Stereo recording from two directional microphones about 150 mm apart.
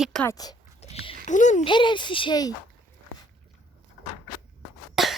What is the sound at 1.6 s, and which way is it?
Speech, 30° left (ahead or behind).